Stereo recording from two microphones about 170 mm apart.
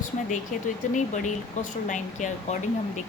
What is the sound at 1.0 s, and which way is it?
A woman's voice, 45° left (ahead or behind).